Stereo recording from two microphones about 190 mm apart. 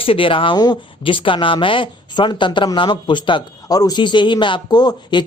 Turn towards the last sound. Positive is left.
turn(degrees=25)  # may be behind; listen again after turning